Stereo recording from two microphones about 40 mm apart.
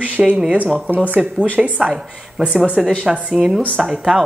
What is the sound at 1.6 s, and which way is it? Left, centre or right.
Speech, centre.